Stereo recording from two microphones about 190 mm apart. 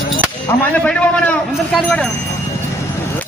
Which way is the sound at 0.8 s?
5° left (ahead or behind).